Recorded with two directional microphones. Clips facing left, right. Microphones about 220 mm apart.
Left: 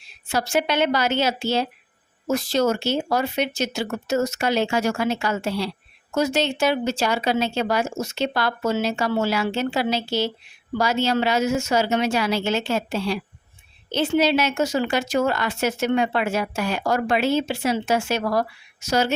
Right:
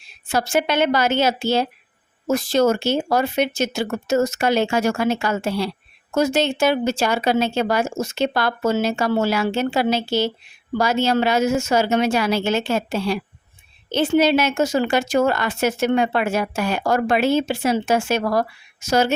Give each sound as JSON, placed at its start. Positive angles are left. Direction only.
{"t": 0.3, "sound": "speech", "side_deg": -50}